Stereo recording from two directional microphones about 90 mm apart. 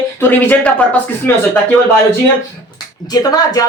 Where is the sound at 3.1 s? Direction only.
45° left (ahead or behind).